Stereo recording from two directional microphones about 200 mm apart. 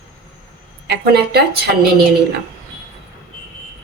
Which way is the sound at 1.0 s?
50° right (ahead or behind).